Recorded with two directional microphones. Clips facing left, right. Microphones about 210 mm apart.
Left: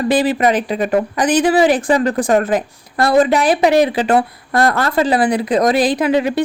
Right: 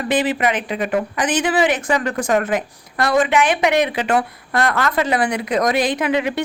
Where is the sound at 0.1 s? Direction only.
35° left (ahead or behind).